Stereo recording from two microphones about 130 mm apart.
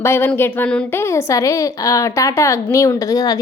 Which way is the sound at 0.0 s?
15° left (ahead or behind).